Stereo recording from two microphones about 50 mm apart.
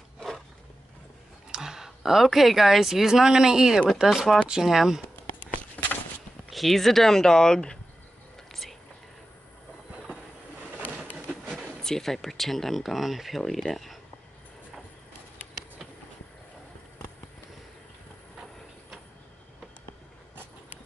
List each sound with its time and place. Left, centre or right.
1.5 s speech: centre
5.8 s walk: left
6.5 s speech: centre
8.5 s whispering: centre
11.4 s a sound: centre
11.8 s speech: centre